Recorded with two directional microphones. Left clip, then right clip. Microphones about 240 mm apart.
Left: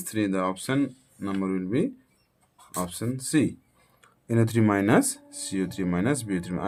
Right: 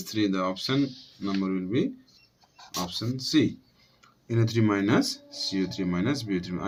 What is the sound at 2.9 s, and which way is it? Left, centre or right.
Speech, left.